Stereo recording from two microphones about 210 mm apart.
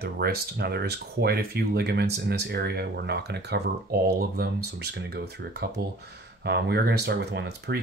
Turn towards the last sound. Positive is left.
turn(degrees=-55)  # may be behind; listen again after turning